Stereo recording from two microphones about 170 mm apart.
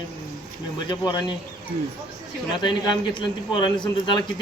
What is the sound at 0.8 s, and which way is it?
Speech, 25° left (ahead or behind).